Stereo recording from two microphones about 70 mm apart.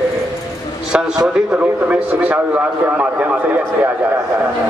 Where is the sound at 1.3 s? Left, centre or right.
Centre.